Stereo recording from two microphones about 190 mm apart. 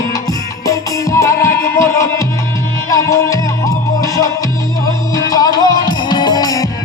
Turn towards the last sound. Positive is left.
turn(degrees=20)  # may be behind; listen again after turning